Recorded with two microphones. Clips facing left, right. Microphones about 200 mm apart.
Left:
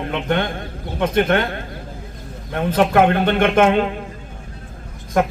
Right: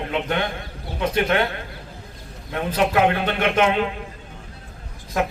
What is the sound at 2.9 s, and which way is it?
Speech, 50° left (ahead or behind).